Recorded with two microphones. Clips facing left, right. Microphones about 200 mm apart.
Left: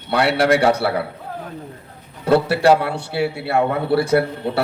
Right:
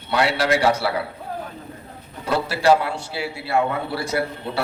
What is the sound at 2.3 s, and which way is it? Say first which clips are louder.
A man's voice: left 4 dB; 60° left (ahead or behind).